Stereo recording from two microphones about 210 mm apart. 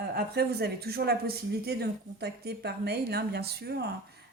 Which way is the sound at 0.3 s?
50° right (ahead or behind).